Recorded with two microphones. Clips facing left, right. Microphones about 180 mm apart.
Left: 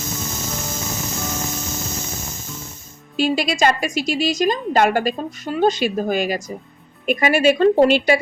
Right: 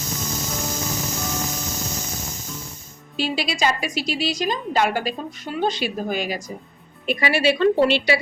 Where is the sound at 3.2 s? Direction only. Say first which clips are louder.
Left 5 dB; 50° left (ahead or behind).